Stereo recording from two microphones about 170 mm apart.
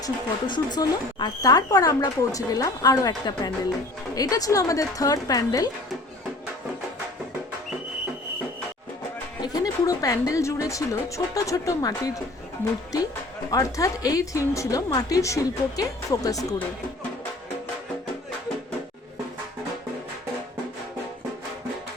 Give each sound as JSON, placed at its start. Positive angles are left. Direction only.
{"t": 0.0, "sound": "speech", "side_deg": 25}
{"t": 9.4, "sound": "speech", "side_deg": 25}
{"t": 13.5, "sound": "speech", "side_deg": 20}